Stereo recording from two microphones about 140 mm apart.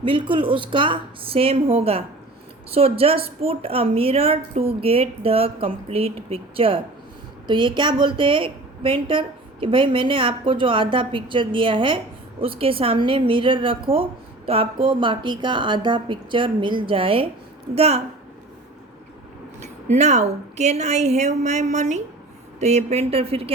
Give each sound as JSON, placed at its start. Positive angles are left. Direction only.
{"t": 0.0, "sound": "a woman's voice", "side_deg": -40}
{"t": 19.6, "sound": "speech", "side_deg": -55}